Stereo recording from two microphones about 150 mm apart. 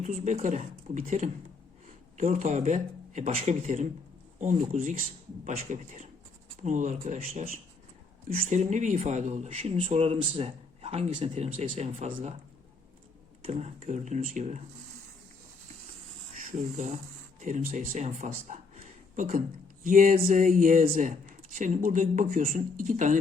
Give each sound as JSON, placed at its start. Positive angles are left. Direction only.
{"t": 0.0, "sound": "speech", "side_deg": -55}
{"t": 8.3, "sound": "speech", "side_deg": -55}
{"t": 13.4, "sound": "speech", "side_deg": -45}
{"t": 16.5, "sound": "speech", "side_deg": -50}
{"t": 20.8, "sound": "speech", "side_deg": -50}